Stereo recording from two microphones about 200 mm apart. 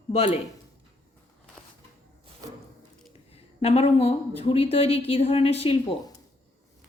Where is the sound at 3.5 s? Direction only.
30° left (ahead or behind).